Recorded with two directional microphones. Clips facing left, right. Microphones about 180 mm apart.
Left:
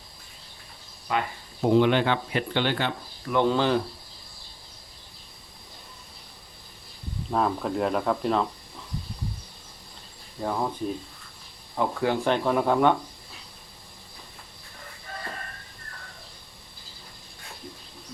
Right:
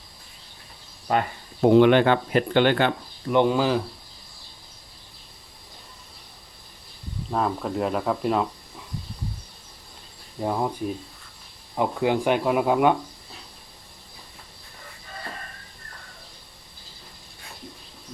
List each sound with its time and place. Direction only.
1.1 s speech: 40° right (ahead or behind)
1.6 s speech: 65° right (ahead or behind)
3.2 s speech: 15° right (ahead or behind)
7.3 s speech: centre (ahead or behind)
10.4 s speech: 15° right (ahead or behind)
11.8 s speech: 15° right (ahead or behind)